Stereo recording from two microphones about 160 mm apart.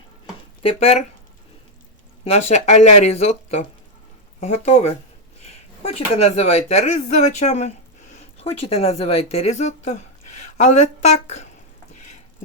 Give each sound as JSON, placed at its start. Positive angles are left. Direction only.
{"t": 0.6, "sound": "speech", "side_deg": 40}
{"t": 2.2, "sound": "speech", "side_deg": 40}
{"t": 5.4, "sound": "a sound", "side_deg": 40}
{"t": 6.1, "sound": "speech", "side_deg": 40}
{"t": 11.9, "sound": "frying", "side_deg": 45}